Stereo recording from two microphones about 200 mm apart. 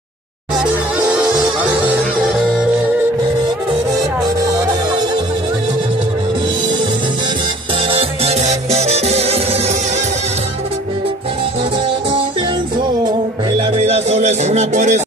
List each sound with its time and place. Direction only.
0.6 s music: 5° right (ahead or behind)
7.9 s music: 30° right (ahead or behind)
13.6 s music: 30° right (ahead or behind)